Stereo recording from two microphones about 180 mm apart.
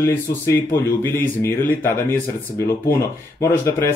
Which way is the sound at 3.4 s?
15° left (ahead or behind).